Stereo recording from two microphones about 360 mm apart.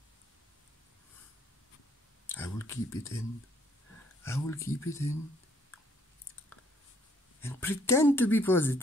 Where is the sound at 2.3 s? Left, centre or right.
Centre.